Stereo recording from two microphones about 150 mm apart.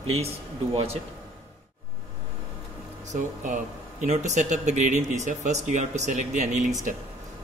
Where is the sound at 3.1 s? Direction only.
60° right (ahead or behind).